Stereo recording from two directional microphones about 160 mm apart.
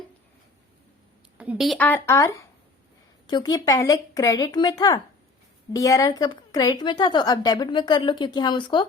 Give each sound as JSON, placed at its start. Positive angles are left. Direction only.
{"t": 1.4, "sound": "a woman's voice", "side_deg": -5}
{"t": 1.8, "sound": "a woman's voice", "side_deg": 15}